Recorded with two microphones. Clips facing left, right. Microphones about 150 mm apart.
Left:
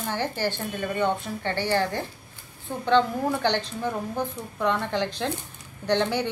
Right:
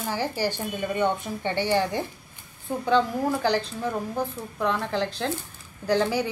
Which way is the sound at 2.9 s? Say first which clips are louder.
Left 1 dB; 5° right (ahead or behind).